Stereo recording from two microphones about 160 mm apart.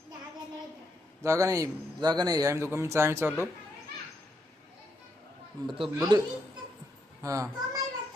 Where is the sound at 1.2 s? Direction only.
20° right (ahead or behind).